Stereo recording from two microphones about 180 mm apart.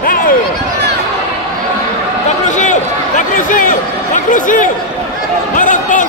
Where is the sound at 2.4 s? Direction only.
45° left (ahead or behind).